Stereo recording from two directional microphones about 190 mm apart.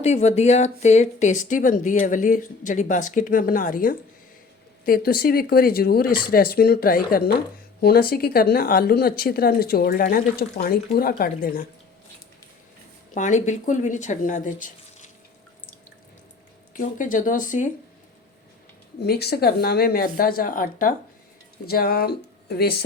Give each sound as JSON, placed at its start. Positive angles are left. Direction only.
{"t": 0.0, "sound": "a woman's voice", "side_deg": 35}
{"t": 13.1, "sound": "speech", "side_deg": 40}
{"t": 16.7, "sound": "a woman's voice", "side_deg": 45}
{"t": 19.0, "sound": "a woman's voice", "side_deg": 55}
{"t": 21.7, "sound": "a sound", "side_deg": 55}